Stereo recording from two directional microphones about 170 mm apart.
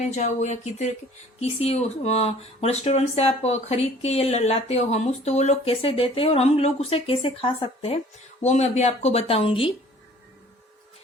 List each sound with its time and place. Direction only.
0.0 s speech: 45° left (ahead or behind)